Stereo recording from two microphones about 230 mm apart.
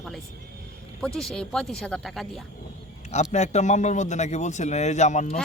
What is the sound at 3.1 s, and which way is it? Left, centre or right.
A man's voice, left.